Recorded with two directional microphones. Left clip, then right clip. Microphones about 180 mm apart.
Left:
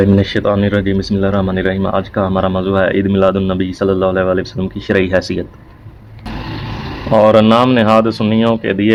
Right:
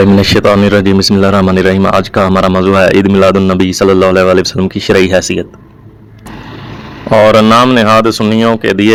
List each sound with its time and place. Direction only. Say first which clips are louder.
0.0 s speech: right 6 dB; 40° right (ahead or behind); by 5.5 s 25° right (ahead or behind)
7.1 s speech: right 4 dB; 35° right (ahead or behind)